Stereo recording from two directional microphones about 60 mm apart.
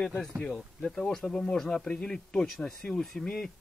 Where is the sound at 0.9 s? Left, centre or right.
Centre.